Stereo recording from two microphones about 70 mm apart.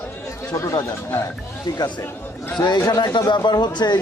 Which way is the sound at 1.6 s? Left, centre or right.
Left.